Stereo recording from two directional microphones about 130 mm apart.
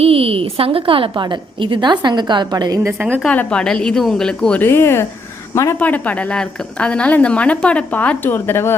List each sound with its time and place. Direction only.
0.0 s a woman's voice: 45° right (ahead or behind); by 2.9 s 30° right (ahead or behind)
3.2 s a woman's voice: 5° left (ahead or behind)